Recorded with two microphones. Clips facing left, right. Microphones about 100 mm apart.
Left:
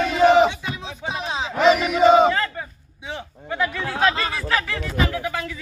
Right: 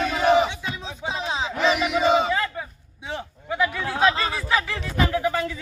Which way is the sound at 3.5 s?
15° right (ahead or behind).